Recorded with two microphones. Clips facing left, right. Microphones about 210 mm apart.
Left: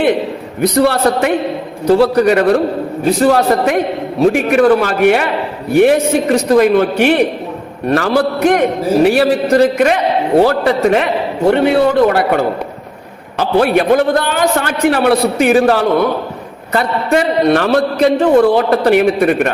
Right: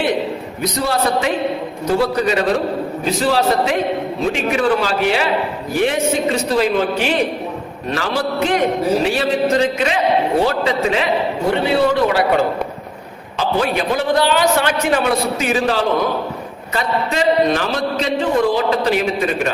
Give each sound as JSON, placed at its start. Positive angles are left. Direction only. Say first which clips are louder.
{"t": 0.6, "sound": "a man's voice", "louder": "left 8 dB", "side_deg": 60}
{"t": 3.2, "sound": "a man's voice", "louder": "left 4 dB", "side_deg": 50}
{"t": 16.7, "sound": "a man's voice", "louder": "left 6 dB", "side_deg": 60}